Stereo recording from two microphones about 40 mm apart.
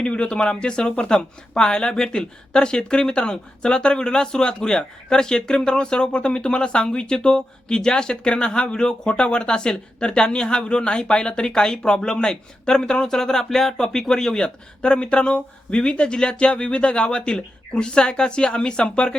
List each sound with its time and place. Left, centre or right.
0.0 s speech: left